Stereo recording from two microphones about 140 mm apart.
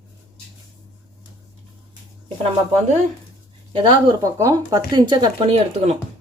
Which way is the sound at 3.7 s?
30° right (ahead or behind).